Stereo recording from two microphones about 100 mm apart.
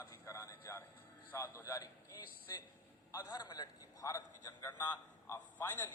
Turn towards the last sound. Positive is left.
turn(degrees=20)  # may be behind; listen again after turning